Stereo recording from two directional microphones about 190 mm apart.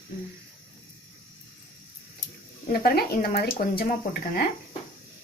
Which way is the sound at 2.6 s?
55° left (ahead or behind).